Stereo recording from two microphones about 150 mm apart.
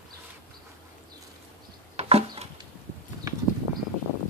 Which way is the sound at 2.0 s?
45° right (ahead or behind).